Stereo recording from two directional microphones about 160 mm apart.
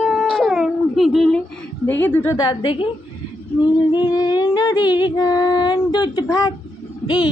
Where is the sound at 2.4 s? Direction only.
30° left (ahead or behind).